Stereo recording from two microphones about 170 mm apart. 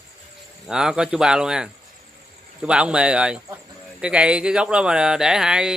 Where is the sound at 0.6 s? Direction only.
5° right (ahead or behind).